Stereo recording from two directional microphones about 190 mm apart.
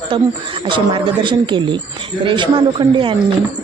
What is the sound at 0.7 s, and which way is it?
Speech, 25° right (ahead or behind).